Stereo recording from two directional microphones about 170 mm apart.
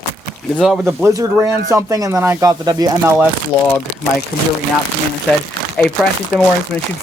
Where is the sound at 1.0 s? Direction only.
15° right (ahead or behind).